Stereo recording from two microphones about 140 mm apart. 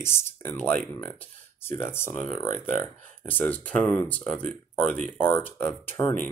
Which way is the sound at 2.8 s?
15° left (ahead or behind).